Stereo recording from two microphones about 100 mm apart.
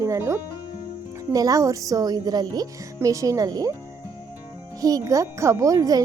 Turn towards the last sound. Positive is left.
turn(degrees=-35)  # may be behind; listen again after turning